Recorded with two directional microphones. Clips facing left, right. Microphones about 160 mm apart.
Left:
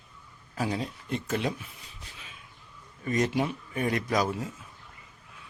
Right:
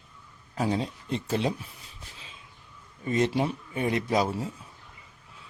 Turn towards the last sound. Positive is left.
turn(degrees=-30)  # may be behind; listen again after turning